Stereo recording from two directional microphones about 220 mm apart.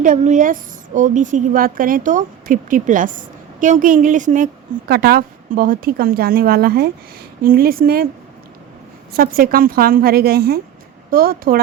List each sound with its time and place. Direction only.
0.0 s a woman's voice: 35° right (ahead or behind)
9.1 s a woman's voice: 40° right (ahead or behind)